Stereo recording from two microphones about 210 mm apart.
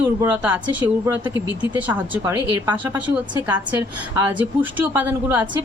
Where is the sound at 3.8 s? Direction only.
15° right (ahead or behind).